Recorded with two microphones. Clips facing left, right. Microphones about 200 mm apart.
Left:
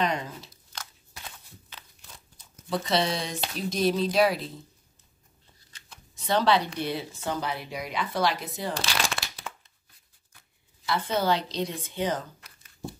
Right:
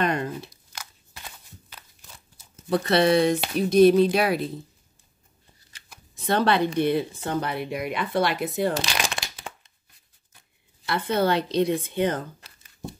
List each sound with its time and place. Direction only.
0.0 s speech: 55° right (ahead or behind)
2.7 s speech: 60° right (ahead or behind)
6.1 s speech: 55° right (ahead or behind)
8.7 s shuffling cards: 15° right (ahead or behind)
10.9 s speech: 60° right (ahead or behind)
12.4 s a sound: 30° right (ahead or behind)